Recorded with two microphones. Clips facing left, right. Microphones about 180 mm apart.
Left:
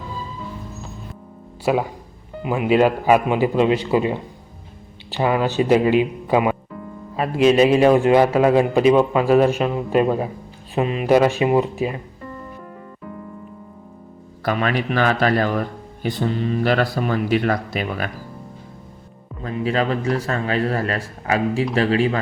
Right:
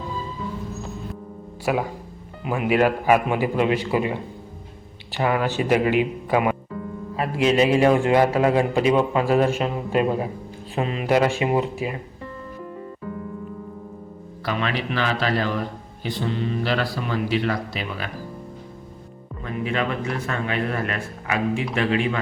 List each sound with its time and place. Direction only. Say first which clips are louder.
1.7 s a man's voice: left 4 dB; 20° left (ahead or behind)
5.1 s a man's voice: left 3 dB; 20° left (ahead or behind)
6.2 s music: left 3 dB; 20° left (ahead or behind)
7.2 s a man's voice: left 4 dB; 20° left (ahead or behind)
14.4 s speech: left 4 dB; 50° left (ahead or behind)
19.4 s speech: left 4 dB; 35° left (ahead or behind)